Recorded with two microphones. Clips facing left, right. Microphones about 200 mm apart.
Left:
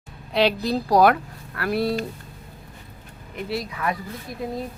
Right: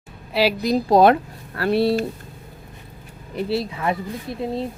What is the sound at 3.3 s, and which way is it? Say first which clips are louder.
Speech: right 5 dB; 30° right (ahead or behind).